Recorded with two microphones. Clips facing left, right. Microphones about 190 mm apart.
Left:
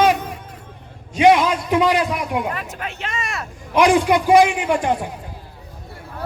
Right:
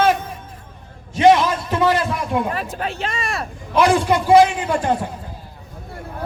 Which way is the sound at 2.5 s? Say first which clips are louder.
Right 4 dB; 35° right (ahead or behind).